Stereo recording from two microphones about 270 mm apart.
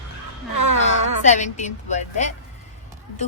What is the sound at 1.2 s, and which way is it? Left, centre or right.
A woman's voice, left.